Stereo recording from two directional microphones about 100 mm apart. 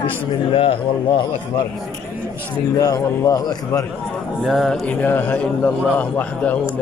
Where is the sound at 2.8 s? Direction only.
40° left (ahead or behind).